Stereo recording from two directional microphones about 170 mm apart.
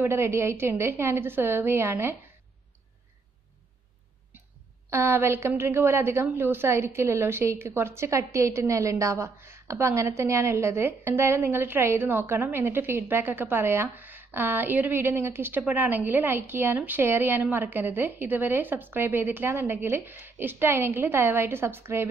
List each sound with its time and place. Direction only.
0.0 s a woman's voice: 15° right (ahead or behind)
4.8 s a woman's voice: 15° right (ahead or behind)